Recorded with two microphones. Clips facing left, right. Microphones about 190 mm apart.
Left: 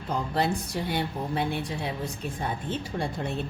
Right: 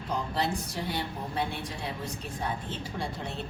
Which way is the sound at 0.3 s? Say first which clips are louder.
Left 6 dB; 55° left (ahead or behind).